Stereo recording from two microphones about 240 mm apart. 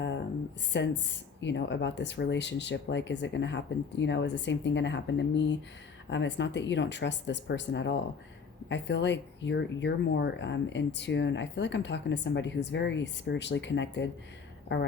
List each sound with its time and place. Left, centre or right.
0.7 s speech: left